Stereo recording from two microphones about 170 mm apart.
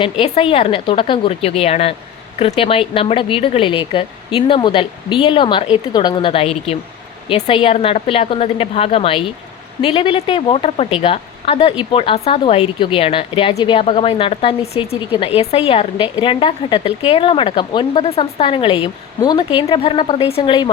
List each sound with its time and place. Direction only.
0.0 s a woman's voice: 30° left (ahead or behind)